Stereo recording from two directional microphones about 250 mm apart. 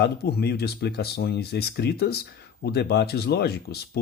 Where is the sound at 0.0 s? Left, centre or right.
Left.